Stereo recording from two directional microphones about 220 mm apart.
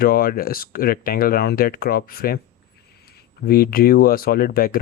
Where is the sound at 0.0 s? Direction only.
40° left (ahead or behind).